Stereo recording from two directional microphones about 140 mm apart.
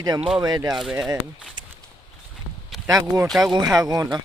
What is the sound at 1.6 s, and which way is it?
Walk, 30° right (ahead or behind).